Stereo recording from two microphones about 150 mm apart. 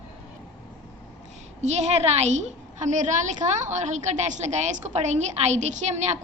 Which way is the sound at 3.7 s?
50° right (ahead or behind).